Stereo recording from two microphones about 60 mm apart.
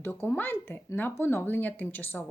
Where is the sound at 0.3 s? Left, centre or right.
Left.